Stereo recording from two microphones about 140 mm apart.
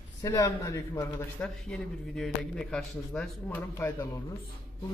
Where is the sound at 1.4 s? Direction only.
5° left (ahead or behind).